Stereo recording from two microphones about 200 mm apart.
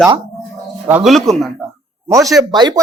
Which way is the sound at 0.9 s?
5° right (ahead or behind).